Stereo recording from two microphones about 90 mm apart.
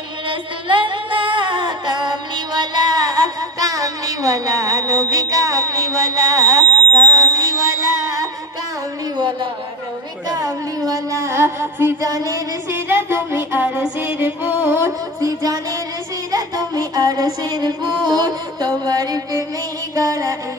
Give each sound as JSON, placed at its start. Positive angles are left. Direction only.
{"t": 0.3, "sound": "music", "side_deg": -65}
{"t": 9.1, "sound": "a man's voice", "side_deg": -60}
{"t": 10.3, "sound": "music", "side_deg": -40}
{"t": 12.0, "sound": "music", "side_deg": -40}
{"t": 12.8, "sound": "music", "side_deg": -25}
{"t": 15.1, "sound": "music", "side_deg": -40}